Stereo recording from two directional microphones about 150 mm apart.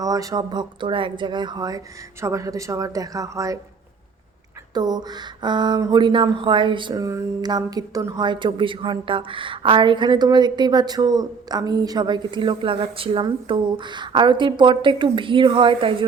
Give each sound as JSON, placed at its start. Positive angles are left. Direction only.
{"t": 0.0, "sound": "speech", "side_deg": -25}
{"t": 4.7, "sound": "speech", "side_deg": -25}